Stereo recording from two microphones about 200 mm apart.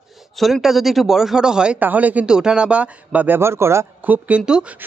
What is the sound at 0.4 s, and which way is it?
Speech, centre (ahead or behind).